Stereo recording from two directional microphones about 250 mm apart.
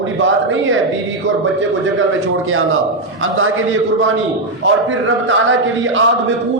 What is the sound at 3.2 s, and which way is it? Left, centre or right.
Speech, right.